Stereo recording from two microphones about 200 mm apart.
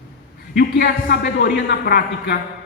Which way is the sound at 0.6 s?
50° left (ahead or behind).